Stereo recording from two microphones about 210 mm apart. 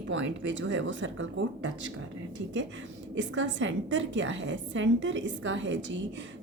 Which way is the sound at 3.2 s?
60° right (ahead or behind).